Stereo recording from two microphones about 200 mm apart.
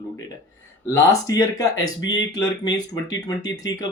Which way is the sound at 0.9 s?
15° left (ahead or behind).